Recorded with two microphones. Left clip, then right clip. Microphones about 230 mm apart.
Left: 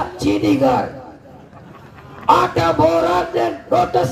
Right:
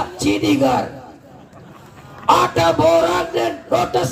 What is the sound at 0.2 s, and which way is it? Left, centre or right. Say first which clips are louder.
Music: left 1 dB; right.